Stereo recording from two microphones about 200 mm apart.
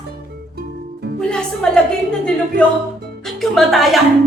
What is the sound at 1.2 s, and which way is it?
Speech, 5° left (ahead or behind).